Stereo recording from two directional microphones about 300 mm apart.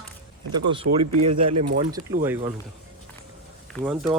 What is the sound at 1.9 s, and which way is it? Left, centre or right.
Speech, centre.